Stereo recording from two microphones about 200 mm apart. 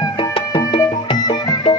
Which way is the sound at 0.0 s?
25° left (ahead or behind).